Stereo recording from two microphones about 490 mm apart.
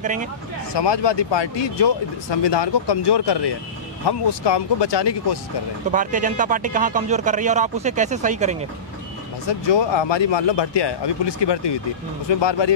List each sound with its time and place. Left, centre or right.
0.0 s speech: centre
0.7 s speech: left
5.9 s speech: centre
9.5 s speech: left